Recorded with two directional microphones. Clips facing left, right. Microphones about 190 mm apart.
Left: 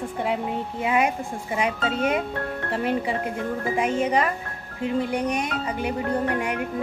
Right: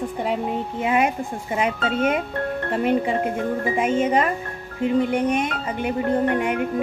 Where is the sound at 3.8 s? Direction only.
25° right (ahead or behind).